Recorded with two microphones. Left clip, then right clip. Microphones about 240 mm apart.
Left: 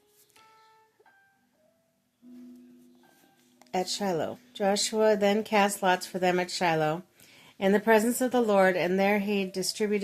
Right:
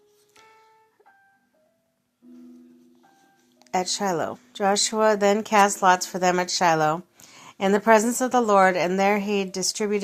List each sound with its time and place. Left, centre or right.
3.7 s speech: centre